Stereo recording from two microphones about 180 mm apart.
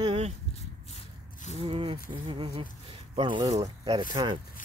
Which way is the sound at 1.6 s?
30° right (ahead or behind).